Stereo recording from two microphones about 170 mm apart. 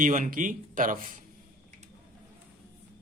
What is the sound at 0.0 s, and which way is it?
Speech, 50° right (ahead or behind).